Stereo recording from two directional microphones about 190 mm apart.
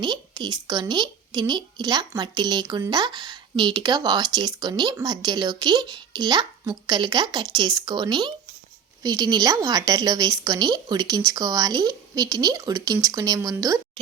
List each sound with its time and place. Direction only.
0.0 s a woman's voice: 25° right (ahead or behind)